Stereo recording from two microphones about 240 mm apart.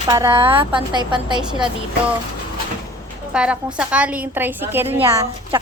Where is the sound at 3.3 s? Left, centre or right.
Centre.